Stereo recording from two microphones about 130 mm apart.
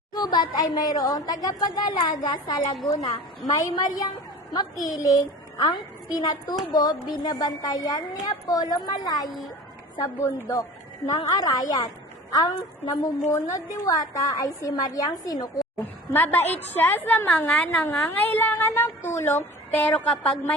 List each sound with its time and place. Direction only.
0.1 s a woman's voice: 30° left (ahead or behind)
15.8 s a woman's voice: 15° left (ahead or behind)